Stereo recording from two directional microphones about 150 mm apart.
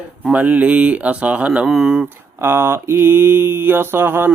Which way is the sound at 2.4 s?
15° right (ahead or behind).